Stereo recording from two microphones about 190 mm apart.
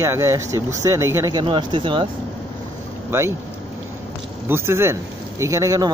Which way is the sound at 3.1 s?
15° right (ahead or behind).